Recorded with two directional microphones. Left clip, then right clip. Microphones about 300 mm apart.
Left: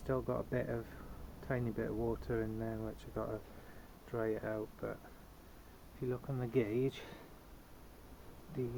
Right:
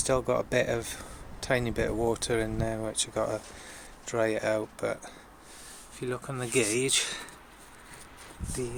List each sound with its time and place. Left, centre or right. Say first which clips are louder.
0.0 s speech: right 11 dB; right
6.1 s speech: right 8 dB; centre